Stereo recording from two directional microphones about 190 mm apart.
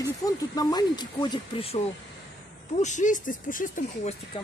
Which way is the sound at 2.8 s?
40° left (ahead or behind).